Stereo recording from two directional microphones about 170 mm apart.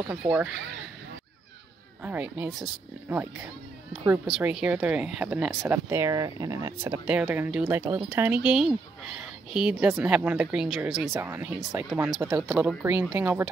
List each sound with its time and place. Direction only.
0.1 s speech: 10° right (ahead or behind)
2.3 s speech: 10° right (ahead or behind)
4.3 s speech: 5° right (ahead or behind)
7.1 s speech: 5° right (ahead or behind)